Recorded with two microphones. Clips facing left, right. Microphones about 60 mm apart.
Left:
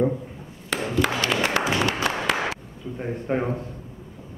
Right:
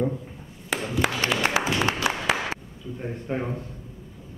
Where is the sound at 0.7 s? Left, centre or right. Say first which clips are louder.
Left 1 dB; centre.